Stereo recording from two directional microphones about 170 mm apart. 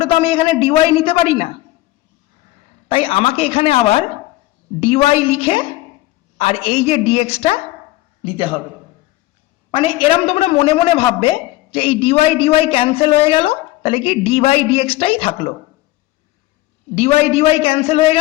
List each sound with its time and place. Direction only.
0.0 s a man's voice: 35° left (ahead or behind)
2.9 s a man's voice: 35° left (ahead or behind)
9.7 s a man's voice: 30° left (ahead or behind)
16.9 s a man's voice: 35° left (ahead or behind)